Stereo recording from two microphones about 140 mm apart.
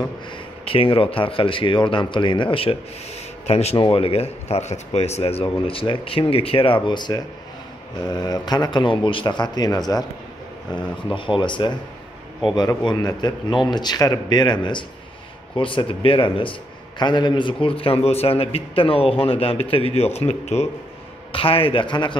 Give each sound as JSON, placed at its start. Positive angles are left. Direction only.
{"t": 0.7, "sound": "a man's voice", "side_deg": 40}